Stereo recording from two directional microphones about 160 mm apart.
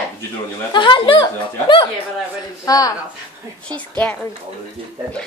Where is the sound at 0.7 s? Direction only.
30° left (ahead or behind).